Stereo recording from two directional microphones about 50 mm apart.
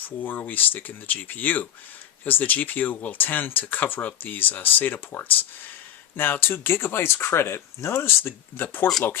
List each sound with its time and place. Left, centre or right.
0.0 s speech: left